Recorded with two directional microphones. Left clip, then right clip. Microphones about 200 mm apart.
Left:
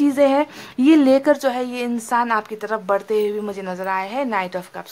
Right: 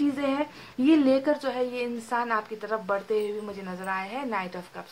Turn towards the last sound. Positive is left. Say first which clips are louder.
# left 9 dB
turn(degrees=35)  # may be behind; listen again after turning